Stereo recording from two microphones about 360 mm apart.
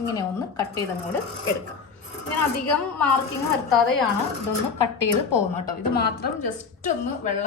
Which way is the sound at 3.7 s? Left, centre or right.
Centre.